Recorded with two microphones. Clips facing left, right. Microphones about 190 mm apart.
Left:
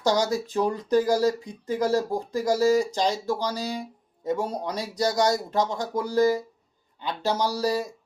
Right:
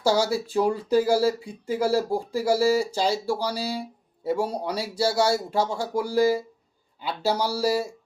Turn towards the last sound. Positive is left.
turn(degrees=-10)  # may be behind; listen again after turning